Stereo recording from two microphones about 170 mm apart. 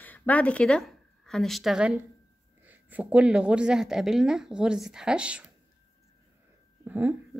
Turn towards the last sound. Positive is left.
turn(degrees=-10)  # may be behind; listen again after turning